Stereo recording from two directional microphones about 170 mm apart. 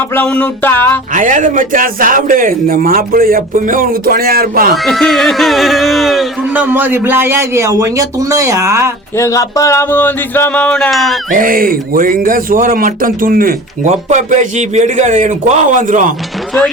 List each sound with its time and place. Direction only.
0.1 s music: 10° left (ahead or behind)
1.1 s speech: 50° right (ahead or behind)
4.7 s speech: centre (ahead or behind); by 8.9 s 15° right (ahead or behind)
9.1 s music: 20° left (ahead or behind); by 11.2 s centre (ahead or behind)
11.3 s speech: 50° right (ahead or behind)
13.8 s speech: 45° right (ahead or behind)